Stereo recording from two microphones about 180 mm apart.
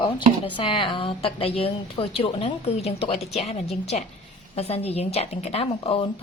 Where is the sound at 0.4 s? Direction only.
30° left (ahead or behind).